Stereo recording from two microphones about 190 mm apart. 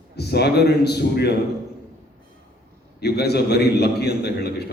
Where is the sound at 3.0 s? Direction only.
60° left (ahead or behind).